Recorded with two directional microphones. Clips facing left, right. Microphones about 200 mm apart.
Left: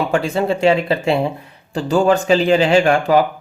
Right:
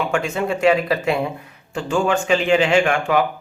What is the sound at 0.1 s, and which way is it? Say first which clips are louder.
Speech: left 4 dB; 35° left (ahead or behind).